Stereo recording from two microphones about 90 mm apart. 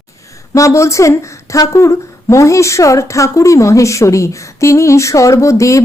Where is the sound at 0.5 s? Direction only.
35° left (ahead or behind).